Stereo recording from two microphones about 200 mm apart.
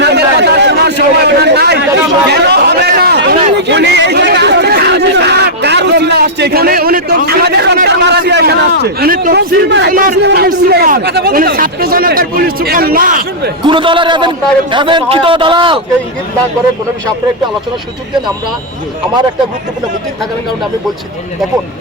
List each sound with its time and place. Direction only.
0.0 s a sound: 55° right (ahead or behind)
8.8 s a man's voice: 50° right (ahead or behind)
13.7 s a man's voice: 25° right (ahead or behind)